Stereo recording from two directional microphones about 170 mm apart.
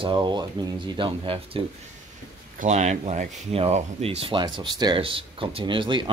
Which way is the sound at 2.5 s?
45° right (ahead or behind).